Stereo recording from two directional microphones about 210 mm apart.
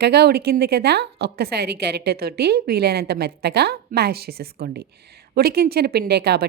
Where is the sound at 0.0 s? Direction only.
50° right (ahead or behind).